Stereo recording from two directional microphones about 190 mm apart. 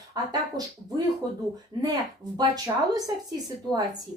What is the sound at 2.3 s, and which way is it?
A woman's voice, 20° right (ahead or behind).